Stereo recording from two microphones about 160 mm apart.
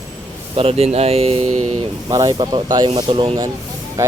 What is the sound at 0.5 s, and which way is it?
Speech, 40° right (ahead or behind).